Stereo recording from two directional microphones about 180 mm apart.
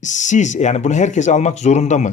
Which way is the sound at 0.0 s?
40° left (ahead or behind).